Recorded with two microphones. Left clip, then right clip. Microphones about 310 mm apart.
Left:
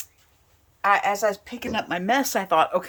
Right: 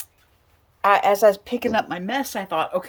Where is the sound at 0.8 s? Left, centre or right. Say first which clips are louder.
Right 4 dB; right.